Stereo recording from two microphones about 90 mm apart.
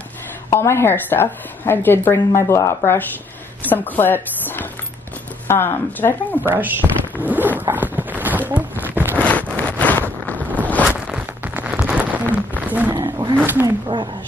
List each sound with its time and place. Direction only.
0.5 s a woman's voice: 30° left (ahead or behind)
6.4 s speech: 20° right (ahead or behind)
7.7 s a sound: 20° right (ahead or behind)
9.2 s vehicle: 15° left (ahead or behind)
10.2 s boat: 15° left (ahead or behind)
10.9 s a sound: 15° right (ahead or behind)
12.9 s roaring cats: 55° right (ahead or behind)
13.9 s speech: 60° right (ahead or behind)